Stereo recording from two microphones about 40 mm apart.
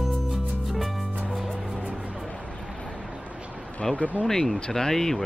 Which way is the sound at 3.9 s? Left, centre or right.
Left.